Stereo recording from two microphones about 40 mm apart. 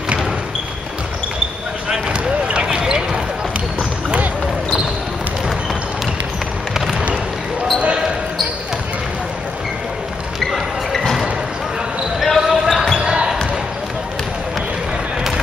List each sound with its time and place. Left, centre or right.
1.9 s basketball bounce: right
7.8 s a sound: right
10.5 s music: centre
12.2 s basketball bounce: centre
13.0 s basketball bounce: right